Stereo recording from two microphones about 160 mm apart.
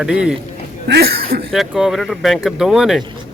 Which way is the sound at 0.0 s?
5° right (ahead or behind).